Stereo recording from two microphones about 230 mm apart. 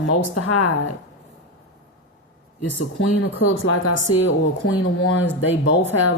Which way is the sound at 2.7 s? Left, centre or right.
Left.